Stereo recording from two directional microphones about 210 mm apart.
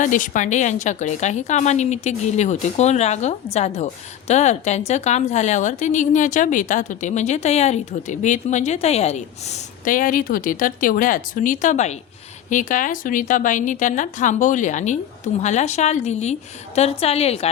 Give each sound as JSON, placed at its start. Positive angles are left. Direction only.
{"t": 0.0, "sound": "a woman's voice", "side_deg": 35}